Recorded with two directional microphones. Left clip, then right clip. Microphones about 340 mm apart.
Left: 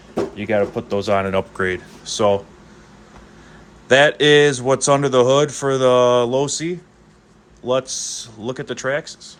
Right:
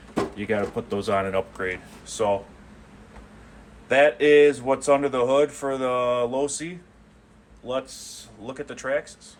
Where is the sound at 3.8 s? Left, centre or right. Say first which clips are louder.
Left 5 dB; left.